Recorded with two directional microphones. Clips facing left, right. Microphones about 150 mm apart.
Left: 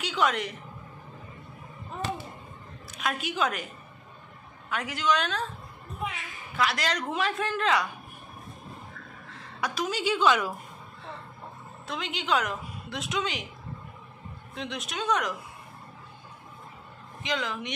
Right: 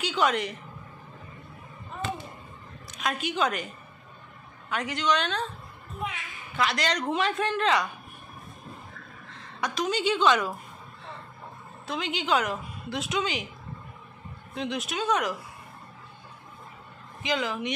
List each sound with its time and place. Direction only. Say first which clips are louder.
0.0 s a woman's voice: right 1 dB; centre (ahead or behind)
2.9 s a woman's voice: right 1 dB; 5° left (ahead or behind)
4.6 s a woman's voice: right 1 dB; centre (ahead or behind)
6.5 s a woman's voice: right 1 dB; centre (ahead or behind)
9.6 s a woman's voice: right 2 dB; 5° left (ahead or behind)
11.9 s a woman's voice: right 2 dB; centre (ahead or behind)
14.5 s a woman's voice: right 4 dB; centre (ahead or behind)
17.2 s a woman's voice: right 3 dB; 5° right (ahead or behind)